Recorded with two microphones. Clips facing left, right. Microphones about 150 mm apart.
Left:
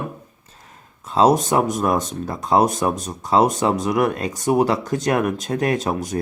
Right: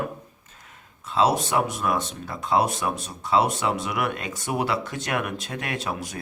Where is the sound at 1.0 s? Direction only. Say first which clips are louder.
Left 6 dB; 40° left (ahead or behind).